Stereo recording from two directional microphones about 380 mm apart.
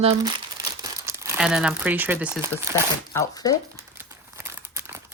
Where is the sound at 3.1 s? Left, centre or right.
Centre.